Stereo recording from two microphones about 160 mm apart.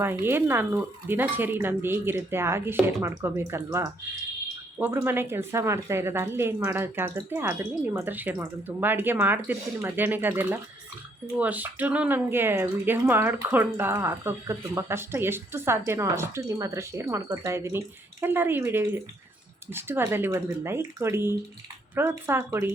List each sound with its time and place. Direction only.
0.0 s speech: 15° right (ahead or behind)